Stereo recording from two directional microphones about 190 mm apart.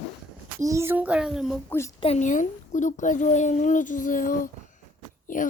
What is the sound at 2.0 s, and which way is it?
A child's voice, 35° left (ahead or behind).